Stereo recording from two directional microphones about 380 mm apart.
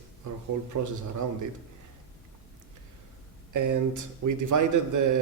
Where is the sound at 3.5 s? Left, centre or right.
Right.